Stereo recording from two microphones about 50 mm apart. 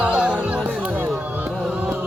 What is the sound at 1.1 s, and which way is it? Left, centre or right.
Music, right.